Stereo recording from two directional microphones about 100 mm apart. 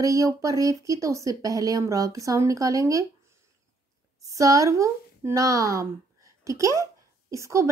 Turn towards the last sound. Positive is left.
turn(degrees=-30)  # may be behind; listen again after turning